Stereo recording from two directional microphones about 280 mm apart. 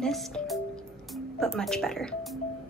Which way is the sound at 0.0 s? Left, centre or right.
Centre.